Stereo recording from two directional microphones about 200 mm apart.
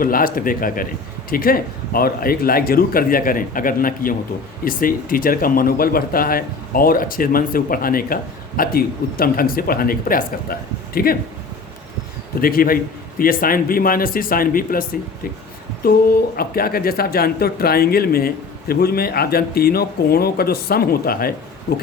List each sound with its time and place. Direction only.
0.0 s speech: 45° left (ahead or behind)
12.4 s speech: 45° left (ahead or behind)